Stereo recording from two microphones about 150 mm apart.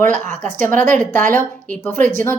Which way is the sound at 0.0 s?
55° right (ahead or behind).